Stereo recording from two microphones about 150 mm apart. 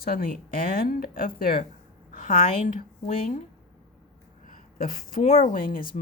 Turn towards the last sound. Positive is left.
turn(degrees=70)  # may be behind; listen again after turning